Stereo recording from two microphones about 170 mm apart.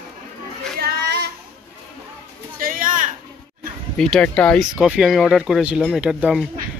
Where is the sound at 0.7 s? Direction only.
75° right (ahead or behind).